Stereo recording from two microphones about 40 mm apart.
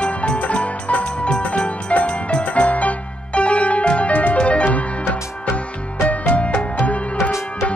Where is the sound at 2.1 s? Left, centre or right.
Left.